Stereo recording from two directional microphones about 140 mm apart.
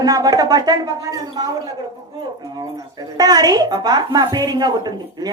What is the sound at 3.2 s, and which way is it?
Speech, 25° right (ahead or behind).